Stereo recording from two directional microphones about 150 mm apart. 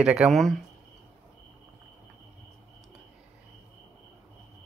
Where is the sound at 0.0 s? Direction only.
5° right (ahead or behind).